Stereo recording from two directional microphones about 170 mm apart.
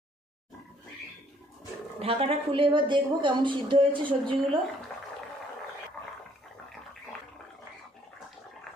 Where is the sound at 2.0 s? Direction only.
35° right (ahead or behind).